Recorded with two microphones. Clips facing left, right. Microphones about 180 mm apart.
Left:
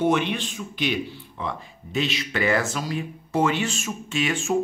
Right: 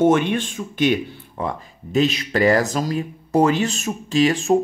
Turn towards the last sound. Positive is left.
turn(degrees=-35)  # may be behind; listen again after turning